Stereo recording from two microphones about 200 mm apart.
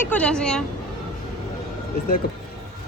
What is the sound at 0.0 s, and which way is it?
Speech, 5° left (ahead or behind).